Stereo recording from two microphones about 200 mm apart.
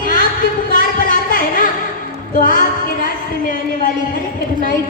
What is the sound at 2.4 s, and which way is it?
Music, 45° left (ahead or behind).